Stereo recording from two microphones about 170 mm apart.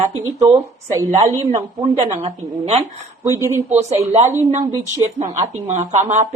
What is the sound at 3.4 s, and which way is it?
Speech, 15° right (ahead or behind).